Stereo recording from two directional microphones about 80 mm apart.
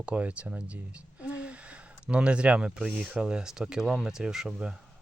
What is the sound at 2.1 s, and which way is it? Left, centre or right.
Speech, centre.